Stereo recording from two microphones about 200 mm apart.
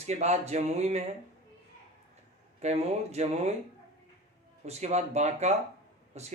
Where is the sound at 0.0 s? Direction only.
35° right (ahead or behind).